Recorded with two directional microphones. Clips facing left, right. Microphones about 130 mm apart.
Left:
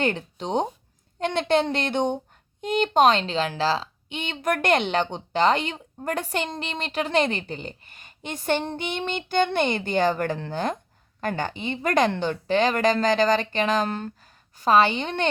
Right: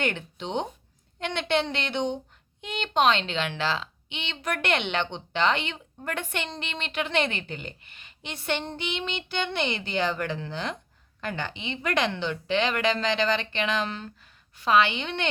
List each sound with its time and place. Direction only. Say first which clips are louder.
0.0 s a woman's voice: left 4 dB; 35° left (ahead or behind)